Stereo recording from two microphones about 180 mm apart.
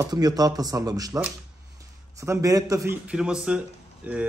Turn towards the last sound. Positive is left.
turn(degrees=-10)  # may be behind; listen again after turning